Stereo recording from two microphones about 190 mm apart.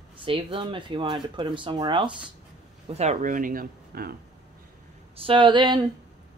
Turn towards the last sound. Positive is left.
turn(degrees=-25)  # may be behind; listen again after turning